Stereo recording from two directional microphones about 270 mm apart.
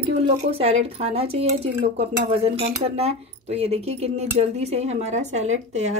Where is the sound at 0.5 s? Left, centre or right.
Right.